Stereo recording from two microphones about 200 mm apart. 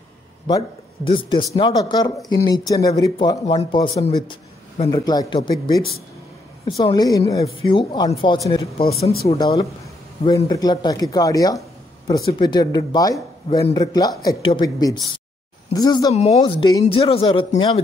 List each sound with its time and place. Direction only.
0.5 s speech: 20° left (ahead or behind)
16.1 s speech: 35° left (ahead or behind)